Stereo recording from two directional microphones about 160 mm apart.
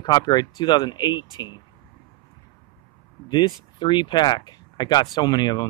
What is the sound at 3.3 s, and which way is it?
Speech, 25° left (ahead or behind).